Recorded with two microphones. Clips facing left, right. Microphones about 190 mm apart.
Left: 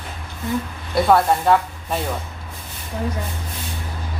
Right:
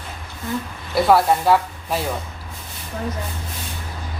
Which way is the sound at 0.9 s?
Centre (ahead or behind).